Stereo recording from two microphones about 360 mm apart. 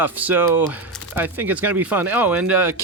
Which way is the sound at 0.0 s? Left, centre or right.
Centre.